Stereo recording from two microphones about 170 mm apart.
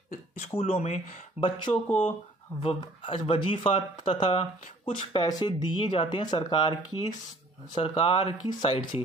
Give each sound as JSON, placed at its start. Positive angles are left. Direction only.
{"t": 0.4, "sound": "speech", "side_deg": 35}
{"t": 1.4, "sound": "speech", "side_deg": 30}